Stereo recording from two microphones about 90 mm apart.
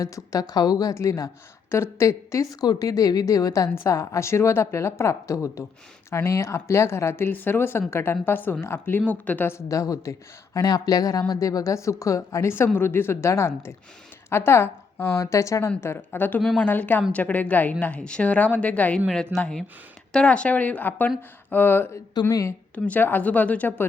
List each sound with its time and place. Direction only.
0.0 s speech: 40° left (ahead or behind); by 9.5 s 15° left (ahead or behind)
9.5 s a woman's voice: 35° left (ahead or behind); by 18.9 s 15° left (ahead or behind)
18.9 s a woman's voice: 5° left (ahead or behind); by 21.8 s 20° left (ahead or behind)
22.1 s speech: 45° left (ahead or behind)
22.7 s speech: 20° left (ahead or behind)